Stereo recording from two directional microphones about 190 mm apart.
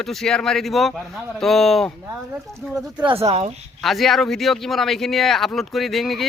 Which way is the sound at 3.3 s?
35° right (ahead or behind).